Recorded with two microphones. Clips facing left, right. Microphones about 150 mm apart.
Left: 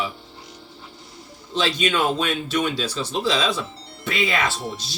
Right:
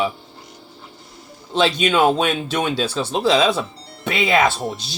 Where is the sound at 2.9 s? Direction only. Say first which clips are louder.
Right 5 dB; 60° right (ahead or behind).